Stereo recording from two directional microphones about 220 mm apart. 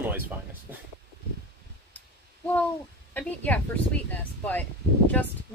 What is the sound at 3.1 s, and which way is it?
Speech, 5° left (ahead or behind).